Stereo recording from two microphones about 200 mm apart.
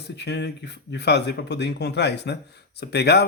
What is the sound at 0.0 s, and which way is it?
Speech, 55° left (ahead or behind).